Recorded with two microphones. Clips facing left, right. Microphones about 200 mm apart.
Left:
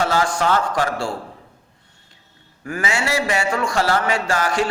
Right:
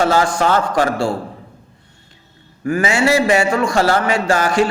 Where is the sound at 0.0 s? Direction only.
45° right (ahead or behind).